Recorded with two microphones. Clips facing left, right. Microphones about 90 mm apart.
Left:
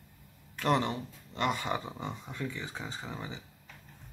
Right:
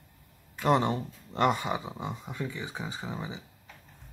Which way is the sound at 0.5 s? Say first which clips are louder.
Right 4 dB; 15° right (ahead or behind).